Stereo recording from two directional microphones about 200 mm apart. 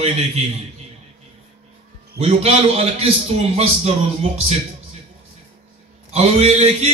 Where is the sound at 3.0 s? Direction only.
30° right (ahead or behind).